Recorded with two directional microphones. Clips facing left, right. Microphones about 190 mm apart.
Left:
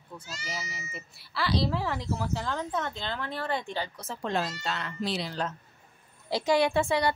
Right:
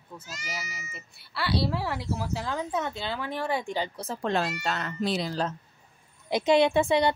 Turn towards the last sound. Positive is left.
turn(degrees=-20)  # may be behind; listen again after turning